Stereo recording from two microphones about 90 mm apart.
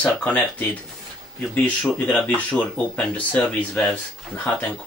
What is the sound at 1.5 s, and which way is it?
Speech, 20° left (ahead or behind).